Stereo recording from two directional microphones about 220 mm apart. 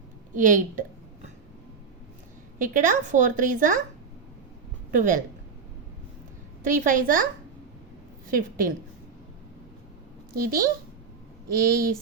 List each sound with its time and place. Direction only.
0.3 s a woman's voice: 35° right (ahead or behind)
2.6 s a woman's voice: 35° right (ahead or behind)
4.9 s a woman's voice: 35° right (ahead or behind)
6.7 s a woman's voice: 35° right (ahead or behind)
8.3 s a woman's voice: 40° right (ahead or behind)
10.3 s a woman's voice: 40° right (ahead or behind)